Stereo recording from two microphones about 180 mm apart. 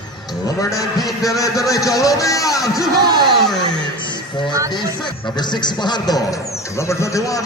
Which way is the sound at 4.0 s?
25° left (ahead or behind).